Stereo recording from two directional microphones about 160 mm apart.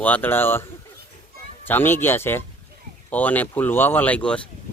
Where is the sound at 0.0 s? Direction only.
10° left (ahead or behind).